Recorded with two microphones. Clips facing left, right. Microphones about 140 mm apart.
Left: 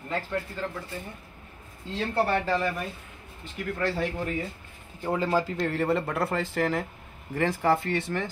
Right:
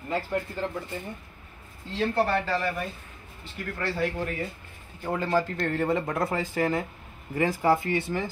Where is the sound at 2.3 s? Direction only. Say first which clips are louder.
Left 1 dB; 20° left (ahead or behind).